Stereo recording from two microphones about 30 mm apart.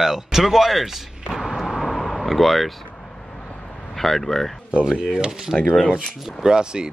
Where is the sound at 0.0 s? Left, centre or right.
Centre.